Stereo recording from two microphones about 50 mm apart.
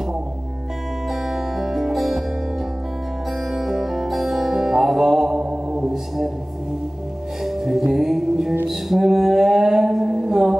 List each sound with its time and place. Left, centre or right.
1.2 s music: centre
3.5 s music: centre
5.4 s mantra: right
7.4 s music: centre
8.6 s mantra: centre